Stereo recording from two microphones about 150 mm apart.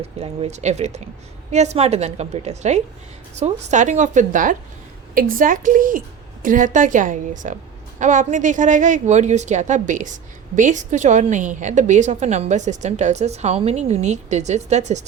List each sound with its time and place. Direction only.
0.0 s a woman's voice: 45° right (ahead or behind)